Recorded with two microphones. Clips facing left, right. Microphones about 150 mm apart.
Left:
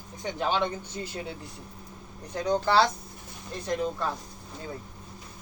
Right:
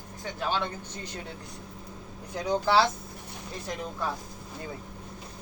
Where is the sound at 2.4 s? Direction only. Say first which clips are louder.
Left 1 dB; 5° right (ahead or behind).